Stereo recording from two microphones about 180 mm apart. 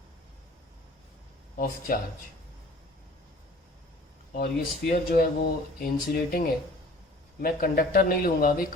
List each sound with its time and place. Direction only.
1.5 s speech: 50° left (ahead or behind)
4.4 s speech: 55° left (ahead or behind)